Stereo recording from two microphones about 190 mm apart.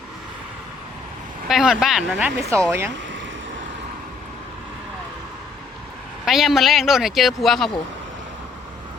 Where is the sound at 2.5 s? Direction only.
15° right (ahead or behind).